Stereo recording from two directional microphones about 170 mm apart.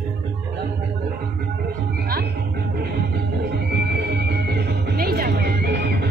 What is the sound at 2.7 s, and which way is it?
Music, 70° right (ahead or behind).